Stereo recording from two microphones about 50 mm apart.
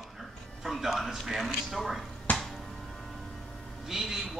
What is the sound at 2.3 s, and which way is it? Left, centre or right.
Music, left.